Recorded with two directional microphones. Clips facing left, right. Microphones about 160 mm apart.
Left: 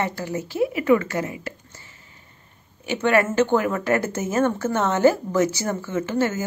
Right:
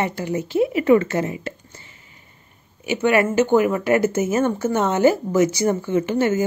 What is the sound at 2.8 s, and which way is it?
Speech, 10° right (ahead or behind).